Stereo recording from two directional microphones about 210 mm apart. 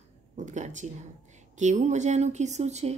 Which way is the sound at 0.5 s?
35° right (ahead or behind).